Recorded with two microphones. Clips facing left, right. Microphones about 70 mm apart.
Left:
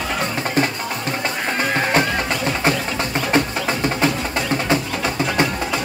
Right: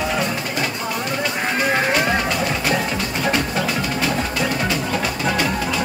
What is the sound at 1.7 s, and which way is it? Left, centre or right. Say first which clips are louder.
Music: right 2 dB; centre.